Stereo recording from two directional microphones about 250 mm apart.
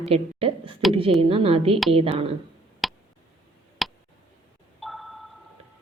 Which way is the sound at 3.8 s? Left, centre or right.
Centre.